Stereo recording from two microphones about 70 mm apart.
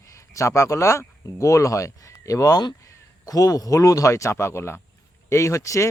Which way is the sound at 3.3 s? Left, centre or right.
Left.